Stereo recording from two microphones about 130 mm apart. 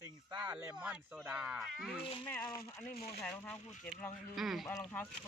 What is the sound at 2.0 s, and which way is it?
Speech, 40° left (ahead or behind).